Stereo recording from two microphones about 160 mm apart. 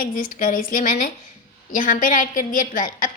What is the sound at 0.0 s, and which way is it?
A woman's voice, 60° left (ahead or behind).